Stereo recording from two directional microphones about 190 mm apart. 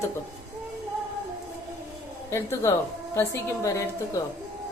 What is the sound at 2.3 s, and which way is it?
A woman's voice, 15° left (ahead or behind).